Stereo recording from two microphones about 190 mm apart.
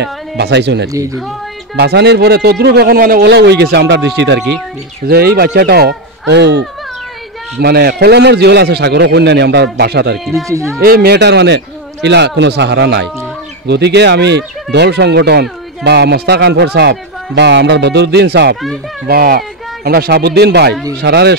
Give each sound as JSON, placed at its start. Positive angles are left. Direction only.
{"t": 0.4, "sound": "speech", "side_deg": -65}
{"t": 0.9, "sound": "speech", "side_deg": -15}
{"t": 1.8, "sound": "speech", "side_deg": -60}
{"t": 5.0, "sound": "speech", "side_deg": -55}
{"t": 7.6, "sound": "speech", "side_deg": -55}
{"t": 10.3, "sound": "speech", "side_deg": -15}
{"t": 10.8, "sound": "speech", "side_deg": -55}